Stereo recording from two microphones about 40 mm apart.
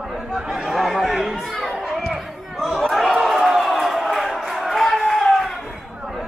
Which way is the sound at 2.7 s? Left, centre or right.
Centre.